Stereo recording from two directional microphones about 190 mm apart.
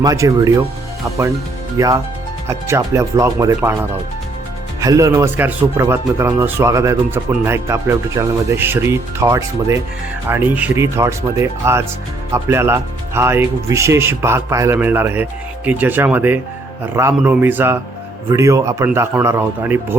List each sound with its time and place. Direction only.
0.0 s speech: 20° right (ahead or behind)
1.8 s speech: 15° right (ahead or behind)